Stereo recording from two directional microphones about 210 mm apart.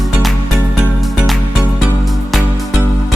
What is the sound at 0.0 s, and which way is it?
Music, centre (ahead or behind).